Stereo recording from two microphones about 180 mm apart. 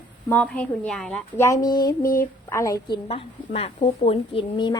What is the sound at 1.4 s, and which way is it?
A woman's voice, 20° left (ahead or behind).